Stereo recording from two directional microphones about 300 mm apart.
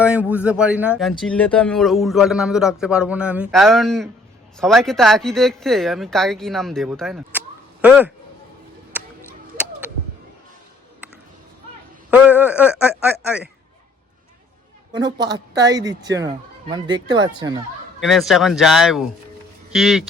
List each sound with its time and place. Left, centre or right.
0.0 s speech: centre
12.1 s speech: centre
14.9 s speech: centre
18.0 s speech: centre